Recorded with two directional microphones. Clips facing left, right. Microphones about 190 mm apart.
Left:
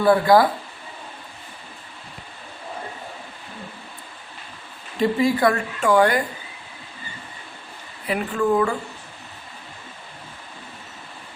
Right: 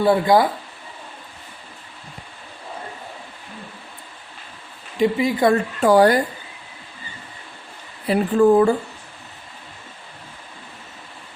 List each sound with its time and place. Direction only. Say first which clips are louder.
0.0 s speech: even; 20° right (ahead or behind)
4.9 s speech: right 1 dB; 15° right (ahead or behind)
5.8 s speech: right 3 dB; 35° right (ahead or behind)
8.0 s speech: right 7 dB; 35° right (ahead or behind)